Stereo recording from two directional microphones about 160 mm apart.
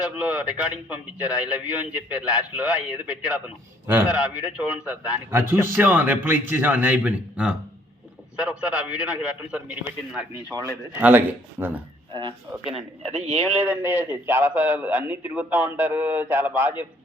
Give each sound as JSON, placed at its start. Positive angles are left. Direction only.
{"t": 0.0, "sound": "a man's voice", "side_deg": -5}
{"t": 13.2, "sound": "speech", "side_deg": -40}
{"t": 13.6, "sound": "a man's voice", "side_deg": -10}